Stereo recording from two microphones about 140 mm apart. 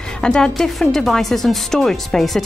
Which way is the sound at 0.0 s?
5° left (ahead or behind).